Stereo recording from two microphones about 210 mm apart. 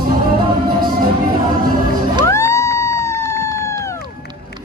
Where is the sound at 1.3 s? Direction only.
45° right (ahead or behind).